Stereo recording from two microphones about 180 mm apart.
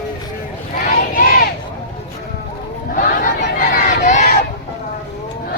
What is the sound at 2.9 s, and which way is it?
Chatter, 50° left (ahead or behind).